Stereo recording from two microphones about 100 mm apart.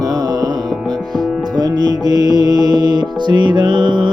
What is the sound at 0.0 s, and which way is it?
Music, 40° right (ahead or behind).